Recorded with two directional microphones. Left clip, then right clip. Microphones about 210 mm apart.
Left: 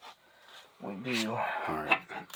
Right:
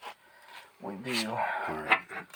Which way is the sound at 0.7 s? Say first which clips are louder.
Even; 15° left (ahead or behind).